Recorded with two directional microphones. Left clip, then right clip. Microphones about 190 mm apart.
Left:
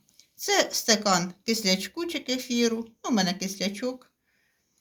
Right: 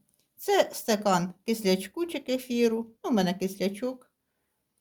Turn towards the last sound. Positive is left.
turn(degrees=-55)  # may be behind; listen again after turning